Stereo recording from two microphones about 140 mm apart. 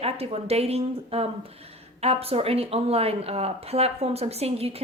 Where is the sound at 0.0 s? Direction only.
45° right (ahead or behind).